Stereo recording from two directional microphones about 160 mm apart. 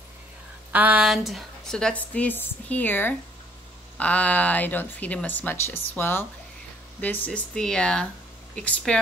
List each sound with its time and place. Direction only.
0.7 s speech: 10° right (ahead or behind); by 8.9 s 5° left (ahead or behind)